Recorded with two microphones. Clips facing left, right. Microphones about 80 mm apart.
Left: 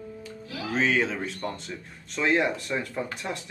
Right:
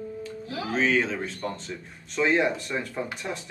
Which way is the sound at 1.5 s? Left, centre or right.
Centre.